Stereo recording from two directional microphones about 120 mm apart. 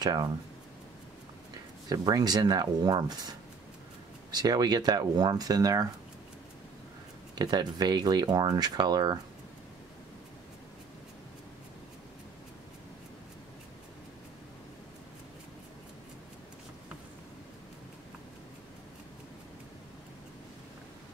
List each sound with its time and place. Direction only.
0.0 s speech: 30° right (ahead or behind)
1.9 s speech: 35° right (ahead or behind)
7.3 s speech: 35° right (ahead or behind)